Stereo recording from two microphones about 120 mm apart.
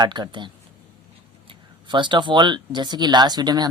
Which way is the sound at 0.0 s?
40° right (ahead or behind).